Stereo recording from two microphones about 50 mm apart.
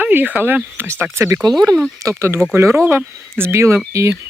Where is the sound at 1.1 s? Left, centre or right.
Right.